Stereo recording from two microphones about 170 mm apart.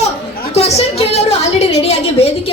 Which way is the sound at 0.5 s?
40° left (ahead or behind).